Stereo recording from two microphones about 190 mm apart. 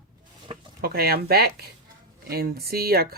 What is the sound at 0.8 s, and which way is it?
Speech, 50° right (ahead or behind).